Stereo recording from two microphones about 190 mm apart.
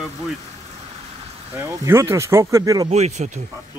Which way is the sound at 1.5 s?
15° right (ahead or behind).